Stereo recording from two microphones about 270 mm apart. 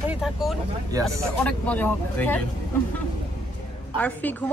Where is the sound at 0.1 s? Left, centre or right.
Centre.